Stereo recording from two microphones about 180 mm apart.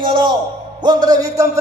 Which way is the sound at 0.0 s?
25° right (ahead or behind).